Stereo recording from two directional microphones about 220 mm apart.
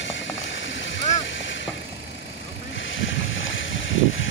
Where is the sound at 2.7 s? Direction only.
60° left (ahead or behind).